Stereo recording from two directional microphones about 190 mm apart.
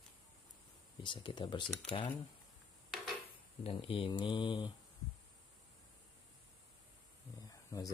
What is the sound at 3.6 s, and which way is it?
Speech, 30° left (ahead or behind).